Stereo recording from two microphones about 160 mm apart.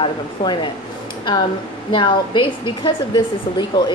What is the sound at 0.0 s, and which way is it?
Speech, 30° left (ahead or behind).